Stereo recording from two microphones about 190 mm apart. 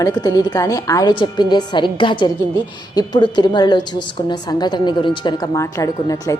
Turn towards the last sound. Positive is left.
turn(degrees=20)  # may be behind; listen again after turning